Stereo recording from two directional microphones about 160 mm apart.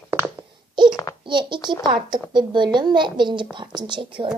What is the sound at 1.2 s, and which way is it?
A child's voice, 30° right (ahead or behind).